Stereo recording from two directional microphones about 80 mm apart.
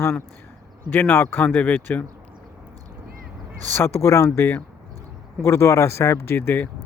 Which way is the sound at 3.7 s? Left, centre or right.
Left.